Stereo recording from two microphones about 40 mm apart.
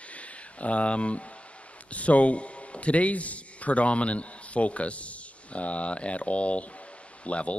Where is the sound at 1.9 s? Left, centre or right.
Left.